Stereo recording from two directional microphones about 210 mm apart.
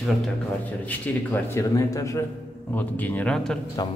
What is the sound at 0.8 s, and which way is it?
A man's voice, 10° left (ahead or behind).